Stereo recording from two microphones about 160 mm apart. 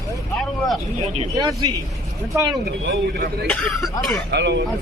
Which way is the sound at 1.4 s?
25° right (ahead or behind).